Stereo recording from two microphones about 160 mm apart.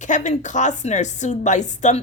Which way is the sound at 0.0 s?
50° left (ahead or behind).